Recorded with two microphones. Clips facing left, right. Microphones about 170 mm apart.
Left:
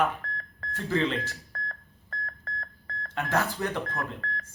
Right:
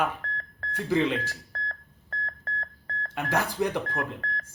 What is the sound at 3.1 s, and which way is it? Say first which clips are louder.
Speech: even; 10° right (ahead or behind).